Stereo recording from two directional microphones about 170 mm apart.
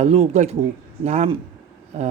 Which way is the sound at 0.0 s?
40° right (ahead or behind).